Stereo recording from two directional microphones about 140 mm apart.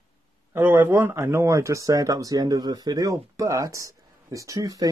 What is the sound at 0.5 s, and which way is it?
Speech, 15° right (ahead or behind).